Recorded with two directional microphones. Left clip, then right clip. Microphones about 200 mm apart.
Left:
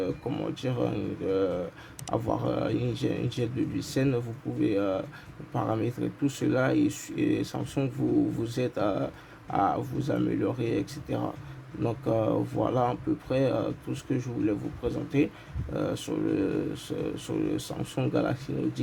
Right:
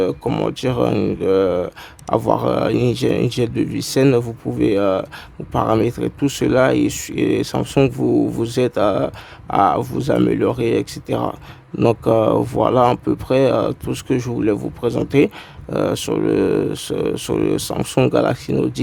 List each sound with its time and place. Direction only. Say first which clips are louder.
0.0 s speech: right 12 dB; 45° right (ahead or behind)